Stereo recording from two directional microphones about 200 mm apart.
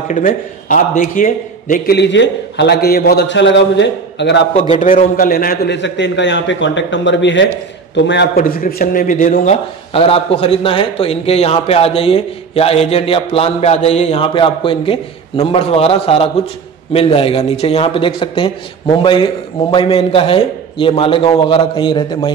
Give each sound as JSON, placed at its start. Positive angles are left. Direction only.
{"t": 0.1, "sound": "a man's voice", "side_deg": 40}
{"t": 4.6, "sound": "a man's voice", "side_deg": 35}